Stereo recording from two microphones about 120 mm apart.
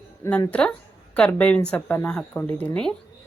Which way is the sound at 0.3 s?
10° left (ahead or behind).